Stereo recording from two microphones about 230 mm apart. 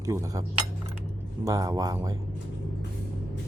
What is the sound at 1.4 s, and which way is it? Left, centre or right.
Speech, centre.